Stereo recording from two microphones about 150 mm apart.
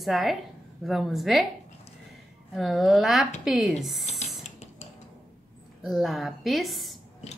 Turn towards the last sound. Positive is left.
turn(degrees=0)  # may be behind; listen again after turning